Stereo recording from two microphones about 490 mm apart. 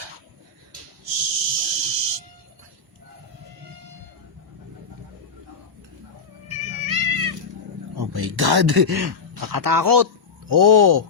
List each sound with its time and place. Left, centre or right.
1.0 s whistle: right
6.7 s cat: right
7.9 s speech: right